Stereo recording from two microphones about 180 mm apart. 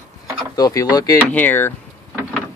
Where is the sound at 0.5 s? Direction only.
20° left (ahead or behind).